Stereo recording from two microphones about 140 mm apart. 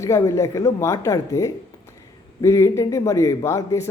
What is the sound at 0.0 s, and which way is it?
A man's voice, 20° left (ahead or behind).